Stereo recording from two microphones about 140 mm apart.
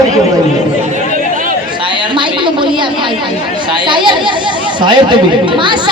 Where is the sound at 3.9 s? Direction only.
35° right (ahead or behind).